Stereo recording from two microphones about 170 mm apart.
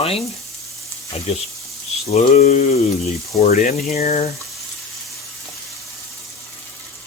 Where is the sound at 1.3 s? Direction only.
35° left (ahead or behind).